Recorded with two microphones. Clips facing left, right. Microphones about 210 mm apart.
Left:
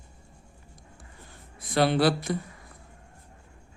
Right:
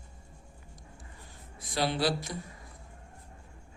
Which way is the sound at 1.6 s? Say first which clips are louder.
Left 7 dB; 60° left (ahead or behind).